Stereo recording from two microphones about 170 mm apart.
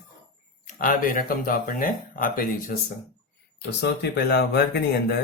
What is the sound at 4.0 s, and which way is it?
Speech, 70° left (ahead or behind).